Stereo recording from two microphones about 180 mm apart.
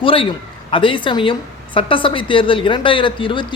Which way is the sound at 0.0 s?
30° left (ahead or behind).